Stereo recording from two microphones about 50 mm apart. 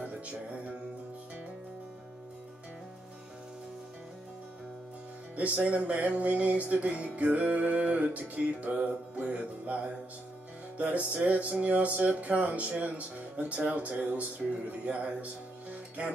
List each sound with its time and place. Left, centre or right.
0.0 s music: right
5.3 s music: right
10.8 s music: right